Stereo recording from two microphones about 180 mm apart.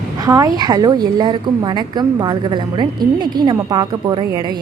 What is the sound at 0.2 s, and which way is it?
A woman's voice, 20° right (ahead or behind).